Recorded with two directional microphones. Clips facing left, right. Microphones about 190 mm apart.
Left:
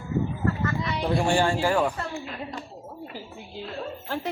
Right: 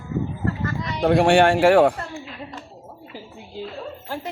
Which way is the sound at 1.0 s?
60° right (ahead or behind).